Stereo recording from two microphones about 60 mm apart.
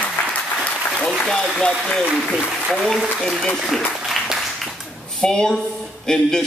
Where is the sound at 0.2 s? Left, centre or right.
Left.